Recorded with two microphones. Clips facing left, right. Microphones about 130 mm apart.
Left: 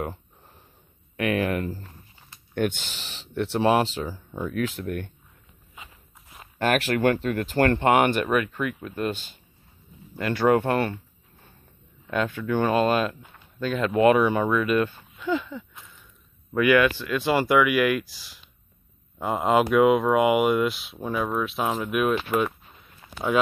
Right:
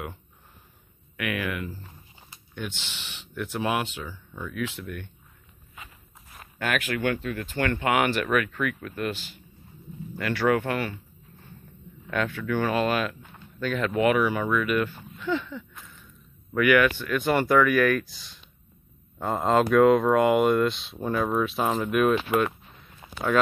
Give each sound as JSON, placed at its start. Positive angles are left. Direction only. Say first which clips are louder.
{"t": 1.1, "sound": "speech", "louder": "left 6 dB", "side_deg": 35}
{"t": 2.5, "sound": "speech", "louder": "left 10 dB", "side_deg": 55}
{"t": 5.8, "sound": "walk", "louder": "even", "side_deg": 20}
{"t": 6.6, "sound": "speech", "louder": "left 5 dB", "side_deg": 40}
{"t": 10.1, "sound": "speech", "louder": "left 3 dB", "side_deg": 20}
{"t": 12.1, "sound": "speech", "louder": "left 2 dB", "side_deg": 20}
{"t": 15.1, "sound": "a sound", "louder": "left 2 dB", "side_deg": 15}
{"t": 16.5, "sound": "speech", "louder": "left 1 dB", "side_deg": 20}
{"t": 18.0, "sound": "speech", "louder": "right 1 dB", "side_deg": 5}